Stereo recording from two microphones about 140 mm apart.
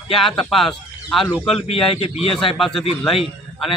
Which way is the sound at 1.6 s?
45° left (ahead or behind).